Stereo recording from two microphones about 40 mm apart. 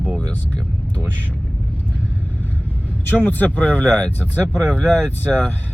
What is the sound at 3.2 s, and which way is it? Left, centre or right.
Speech, left.